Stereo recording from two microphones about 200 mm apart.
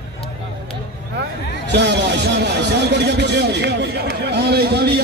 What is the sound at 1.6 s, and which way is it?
Speech, 60° right (ahead or behind).